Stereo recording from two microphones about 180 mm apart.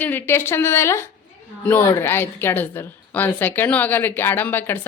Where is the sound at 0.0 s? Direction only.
10° left (ahead or behind).